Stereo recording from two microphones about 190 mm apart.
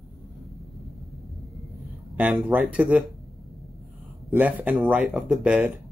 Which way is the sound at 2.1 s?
10° right (ahead or behind).